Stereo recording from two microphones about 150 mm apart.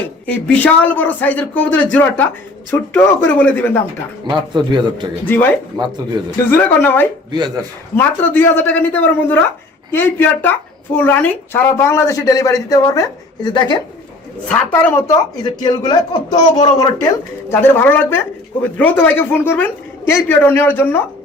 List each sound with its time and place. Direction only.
0.3 s a woman's voice: 10° left (ahead or behind)
4.3 s a man's voice: 30° right (ahead or behind)
5.2 s a woman's voice: 10° left (ahead or behind)
5.7 s speech: 30° right (ahead or behind)
6.5 s a woman's voice: 15° left (ahead or behind)
7.3 s speech: 30° right (ahead or behind)
7.9 s a woman's voice: 10° left (ahead or behind); by 13.7 s 30° left (ahead or behind)
14.4 s speech: 10° left (ahead or behind); by 17.1 s 25° left (ahead or behind)
17.5 s a woman's voice: 15° left (ahead or behind)